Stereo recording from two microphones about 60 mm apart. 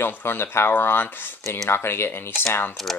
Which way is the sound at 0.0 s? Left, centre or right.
Left.